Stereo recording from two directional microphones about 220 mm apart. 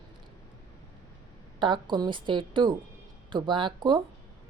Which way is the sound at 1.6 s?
20° right (ahead or behind).